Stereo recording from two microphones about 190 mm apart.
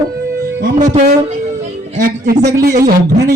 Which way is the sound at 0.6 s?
40° right (ahead or behind).